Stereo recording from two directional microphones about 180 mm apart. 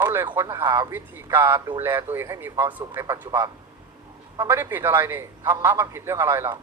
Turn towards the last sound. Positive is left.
turn(degrees=-15)  # may be behind; listen again after turning